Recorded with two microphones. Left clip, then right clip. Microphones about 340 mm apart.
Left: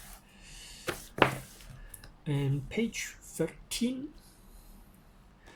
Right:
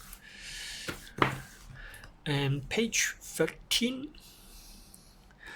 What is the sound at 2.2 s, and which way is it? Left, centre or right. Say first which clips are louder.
Speech: right 4 dB; right.